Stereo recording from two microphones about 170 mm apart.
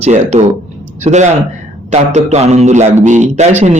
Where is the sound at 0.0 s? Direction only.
40° right (ahead or behind).